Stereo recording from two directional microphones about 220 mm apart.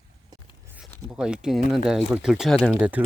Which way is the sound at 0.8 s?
Centre (ahead or behind).